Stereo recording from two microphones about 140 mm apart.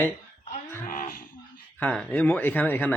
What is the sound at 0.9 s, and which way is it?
Speech, 85° left.